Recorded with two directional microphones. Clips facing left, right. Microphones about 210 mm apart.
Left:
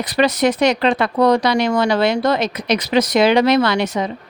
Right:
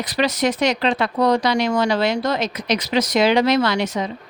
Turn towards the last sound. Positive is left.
turn(degrees=60)  # may be behind; listen again after turning